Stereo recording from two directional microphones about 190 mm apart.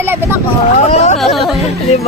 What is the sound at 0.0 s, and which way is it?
Speech, 10° right (ahead or behind).